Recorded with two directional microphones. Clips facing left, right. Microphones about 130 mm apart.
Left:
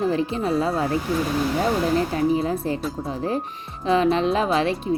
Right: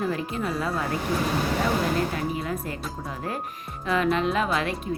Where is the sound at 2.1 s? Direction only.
30° left (ahead or behind).